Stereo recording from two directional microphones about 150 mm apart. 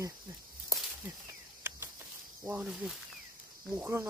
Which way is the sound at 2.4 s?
5° right (ahead or behind).